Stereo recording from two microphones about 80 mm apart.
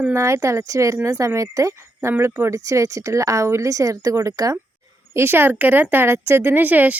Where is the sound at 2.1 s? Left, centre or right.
Right.